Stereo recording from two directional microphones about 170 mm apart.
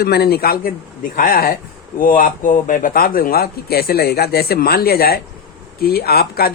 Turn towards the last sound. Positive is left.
turn(degrees=65)  # may be behind; listen again after turning